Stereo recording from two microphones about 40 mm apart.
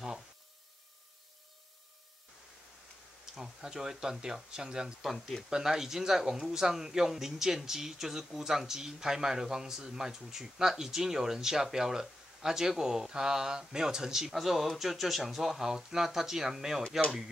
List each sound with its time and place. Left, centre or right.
3.3 s speech: centre
14.3 s speech: centre